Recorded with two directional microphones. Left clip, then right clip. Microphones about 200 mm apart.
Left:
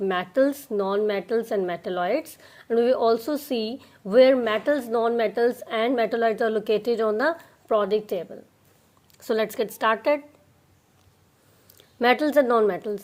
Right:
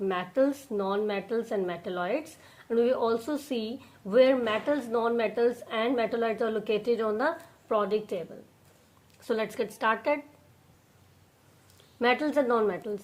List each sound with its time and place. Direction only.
0.0 s speech: 40° left (ahead or behind)
11.9 s speech: 40° left (ahead or behind)